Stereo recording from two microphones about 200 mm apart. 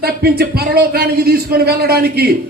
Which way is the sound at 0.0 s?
50° right (ahead or behind).